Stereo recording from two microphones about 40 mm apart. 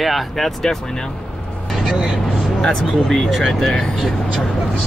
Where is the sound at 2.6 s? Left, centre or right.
Centre.